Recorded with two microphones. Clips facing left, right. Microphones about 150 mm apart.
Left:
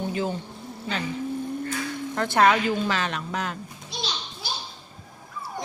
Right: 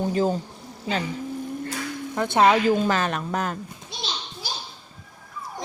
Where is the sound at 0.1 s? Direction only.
40° right (ahead or behind).